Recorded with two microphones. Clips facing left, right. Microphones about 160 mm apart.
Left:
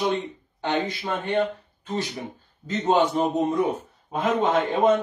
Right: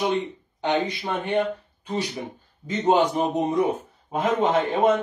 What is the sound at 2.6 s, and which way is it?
A man's voice, 15° right (ahead or behind).